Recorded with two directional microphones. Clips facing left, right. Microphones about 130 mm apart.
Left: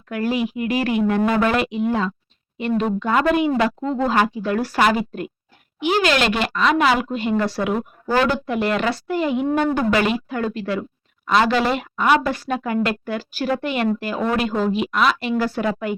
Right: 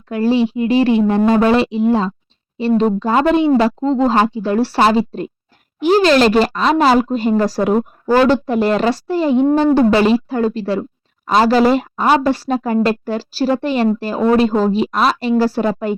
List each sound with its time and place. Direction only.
0.1 s speech: 30° right (ahead or behind)